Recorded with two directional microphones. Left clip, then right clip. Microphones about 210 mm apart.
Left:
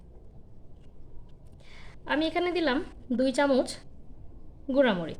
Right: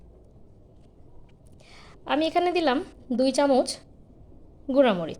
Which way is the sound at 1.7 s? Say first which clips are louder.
Right 3 dB; 10° right (ahead or behind).